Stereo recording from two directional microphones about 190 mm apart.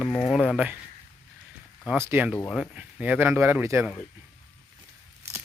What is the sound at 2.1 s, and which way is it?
Speech, 10° right (ahead or behind).